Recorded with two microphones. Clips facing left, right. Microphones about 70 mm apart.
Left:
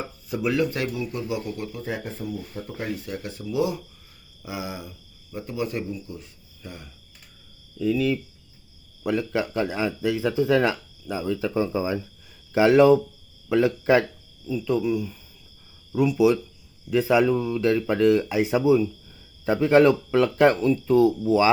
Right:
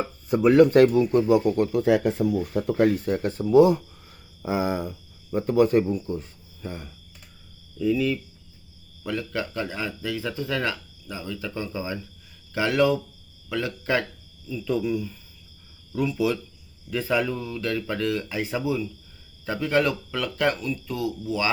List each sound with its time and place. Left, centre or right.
0.3 s speech: right
1.8 s speech: right
6.6 s speech: right
7.8 s speech: centre
9.0 s speech: centre
14.6 s speech: centre; by 21.5 s left